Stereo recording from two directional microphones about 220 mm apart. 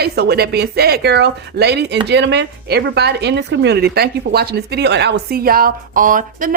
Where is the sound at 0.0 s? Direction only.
45° right (ahead or behind).